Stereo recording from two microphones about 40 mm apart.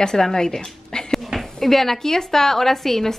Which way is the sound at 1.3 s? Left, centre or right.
Centre.